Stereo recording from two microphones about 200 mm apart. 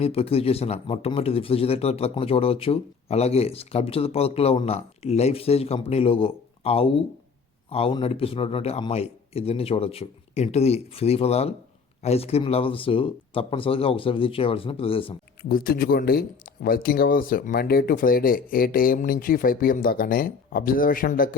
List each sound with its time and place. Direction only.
0.0 s speech: 30° left (ahead or behind)
15.4 s speech: 50° left (ahead or behind)